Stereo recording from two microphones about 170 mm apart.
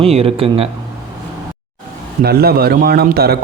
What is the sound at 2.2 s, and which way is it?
A man's voice, 65° right (ahead or behind).